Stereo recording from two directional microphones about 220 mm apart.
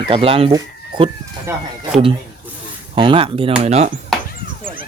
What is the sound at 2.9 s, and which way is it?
Speech, 25° right (ahead or behind).